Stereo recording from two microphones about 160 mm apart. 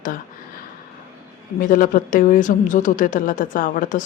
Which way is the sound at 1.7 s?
60° left (ahead or behind).